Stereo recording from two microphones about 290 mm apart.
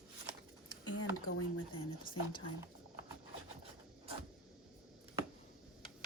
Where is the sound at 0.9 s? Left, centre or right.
Left.